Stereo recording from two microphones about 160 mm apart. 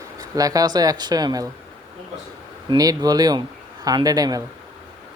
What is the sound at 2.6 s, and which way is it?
Speech, 25° right (ahead or behind).